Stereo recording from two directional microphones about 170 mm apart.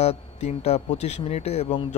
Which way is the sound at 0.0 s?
40° left (ahead or behind).